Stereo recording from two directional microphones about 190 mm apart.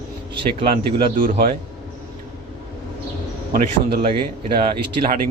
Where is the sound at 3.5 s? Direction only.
55° right (ahead or behind).